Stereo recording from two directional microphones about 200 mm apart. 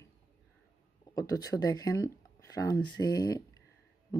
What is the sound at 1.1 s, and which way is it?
Speech, 15° left (ahead or behind).